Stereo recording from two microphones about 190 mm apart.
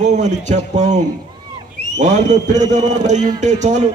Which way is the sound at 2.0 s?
40° right (ahead or behind).